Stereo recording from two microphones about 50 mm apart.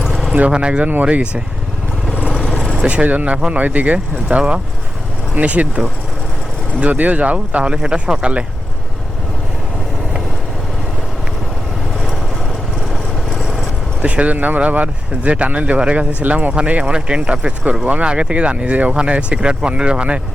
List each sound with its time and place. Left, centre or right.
0.3 s speech: right
2.5 s vehicle: centre
2.8 s speech: right
12.9 s vehicle: centre
14.0 s speech: right